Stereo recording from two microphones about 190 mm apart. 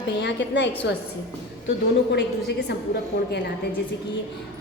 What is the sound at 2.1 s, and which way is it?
Speech, 60° left (ahead or behind).